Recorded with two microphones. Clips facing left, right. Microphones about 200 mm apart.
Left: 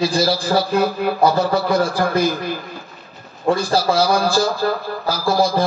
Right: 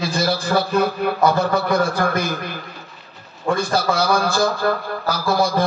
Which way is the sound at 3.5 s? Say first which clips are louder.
Left 2 dB; 30° left (ahead or behind).